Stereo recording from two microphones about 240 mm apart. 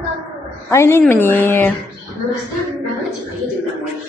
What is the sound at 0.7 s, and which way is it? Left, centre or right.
A woman's voice, centre.